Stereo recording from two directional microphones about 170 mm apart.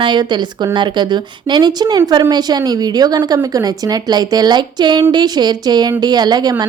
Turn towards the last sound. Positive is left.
turn(degrees=-25)  # may be behind; listen again after turning